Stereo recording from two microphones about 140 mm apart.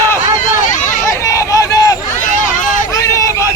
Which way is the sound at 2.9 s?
20° left (ahead or behind).